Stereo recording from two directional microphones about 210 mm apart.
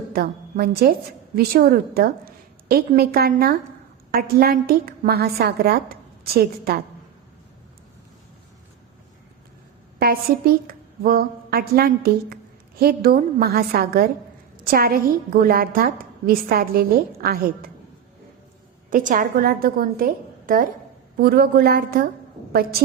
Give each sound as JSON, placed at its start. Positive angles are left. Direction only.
{"t": 0.1, "sound": "a woman's voice", "side_deg": -45}
{"t": 10.0, "sound": "a woman's voice", "side_deg": -45}
{"t": 18.9, "sound": "a woman's voice", "side_deg": -40}